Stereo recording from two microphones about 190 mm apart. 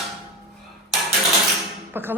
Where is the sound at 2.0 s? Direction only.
10° right (ahead or behind).